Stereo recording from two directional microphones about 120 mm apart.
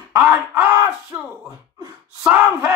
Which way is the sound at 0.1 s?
10° right (ahead or behind).